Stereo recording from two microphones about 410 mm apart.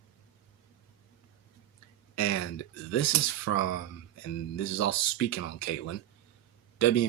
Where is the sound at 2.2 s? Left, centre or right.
Left.